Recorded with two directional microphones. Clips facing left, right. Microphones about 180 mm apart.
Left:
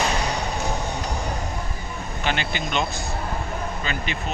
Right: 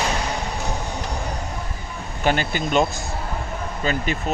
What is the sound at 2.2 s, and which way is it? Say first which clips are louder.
Speech: right 5 dB; 45° right (ahead or behind).